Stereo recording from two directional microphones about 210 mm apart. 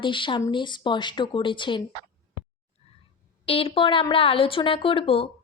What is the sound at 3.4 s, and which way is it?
Speech, 25° left (ahead or behind).